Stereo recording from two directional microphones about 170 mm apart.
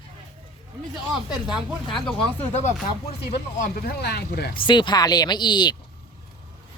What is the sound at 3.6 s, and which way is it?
Speech, 60° left (ahead or behind).